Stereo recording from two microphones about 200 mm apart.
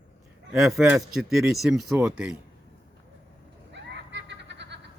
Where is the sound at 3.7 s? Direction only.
60° right (ahead or behind).